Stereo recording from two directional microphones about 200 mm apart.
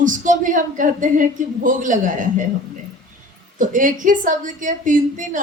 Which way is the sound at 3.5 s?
40° right (ahead or behind).